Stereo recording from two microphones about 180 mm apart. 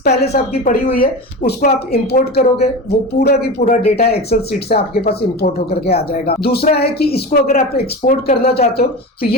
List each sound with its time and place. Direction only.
0.0 s a woman's voice: 55° left (ahead or behind)
3.6 s speech: 40° left (ahead or behind)
3.9 s a woman's voice: 60° left (ahead or behind)